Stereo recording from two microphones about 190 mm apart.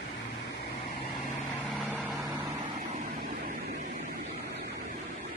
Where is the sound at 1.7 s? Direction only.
Centre (ahead or behind).